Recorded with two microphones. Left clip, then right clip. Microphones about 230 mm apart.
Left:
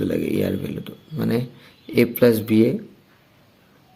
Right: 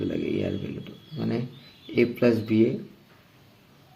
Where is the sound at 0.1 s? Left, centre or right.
Left.